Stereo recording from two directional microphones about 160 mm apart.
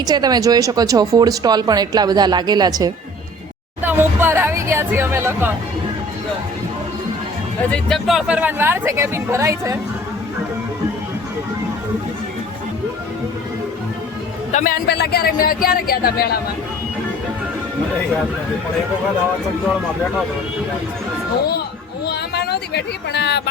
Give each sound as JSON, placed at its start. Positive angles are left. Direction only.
{"t": 0.0, "sound": "speech", "side_deg": -25}
{"t": 3.8, "sound": "speech", "side_deg": -10}
{"t": 7.7, "sound": "speech", "side_deg": 5}
{"t": 14.5, "sound": "speech", "side_deg": 65}
{"t": 22.0, "sound": "a sound", "side_deg": 90}